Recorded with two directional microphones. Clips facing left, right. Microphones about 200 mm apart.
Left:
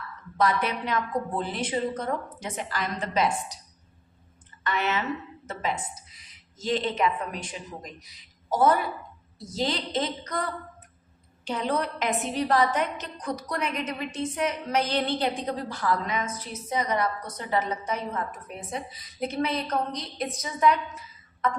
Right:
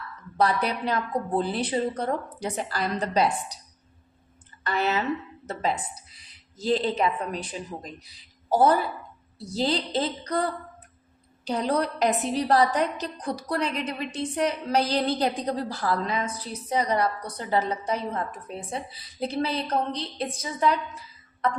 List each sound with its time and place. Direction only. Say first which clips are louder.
0.3 s a woman's voice: right 1 dB; 35° right (ahead or behind)
4.6 s a woman's voice: right 2 dB; 35° right (ahead or behind)